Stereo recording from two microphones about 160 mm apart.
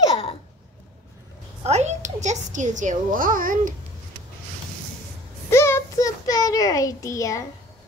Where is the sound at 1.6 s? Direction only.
45° right (ahead or behind).